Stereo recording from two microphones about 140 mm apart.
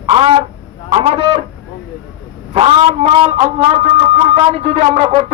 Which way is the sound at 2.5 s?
40° right (ahead or behind).